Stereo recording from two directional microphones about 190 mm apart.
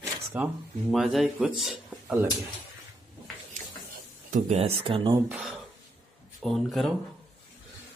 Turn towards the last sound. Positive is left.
turn(degrees=0)  # may be behind; listen again after turning